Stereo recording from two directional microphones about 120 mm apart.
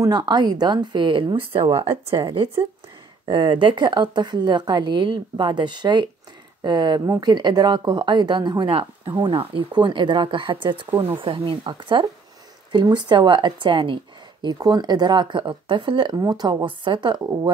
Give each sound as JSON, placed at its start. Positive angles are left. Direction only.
{"t": 0.0, "sound": "speech", "side_deg": -35}